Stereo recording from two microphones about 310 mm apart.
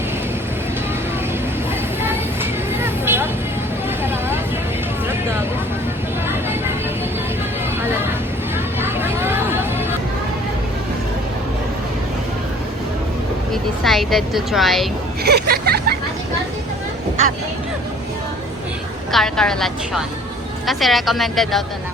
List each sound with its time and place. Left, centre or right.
2.0 s vehicle: centre
8.5 s hubbub: centre
13.5 s speech: centre
15.2 s speech: right
19.1 s speech: centre